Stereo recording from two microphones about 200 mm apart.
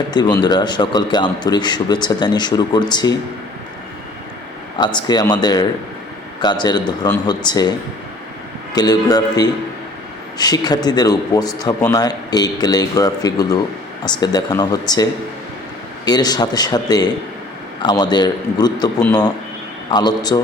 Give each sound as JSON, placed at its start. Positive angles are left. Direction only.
{"t": 0.1, "sound": "speech", "side_deg": 20}
{"t": 4.8, "sound": "speech", "side_deg": 20}
{"t": 8.7, "sound": "speech", "side_deg": 20}
{"t": 16.0, "sound": "speech", "side_deg": 20}
{"t": 19.9, "sound": "speech", "side_deg": 20}